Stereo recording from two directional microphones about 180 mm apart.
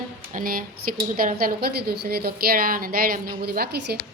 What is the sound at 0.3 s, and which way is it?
A woman's voice, 50° right (ahead or behind).